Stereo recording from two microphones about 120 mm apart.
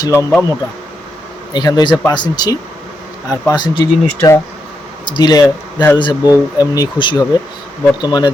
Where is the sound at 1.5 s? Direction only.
35° left (ahead or behind).